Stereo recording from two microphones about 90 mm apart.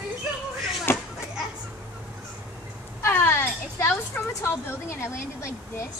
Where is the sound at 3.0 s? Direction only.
25° left (ahead or behind).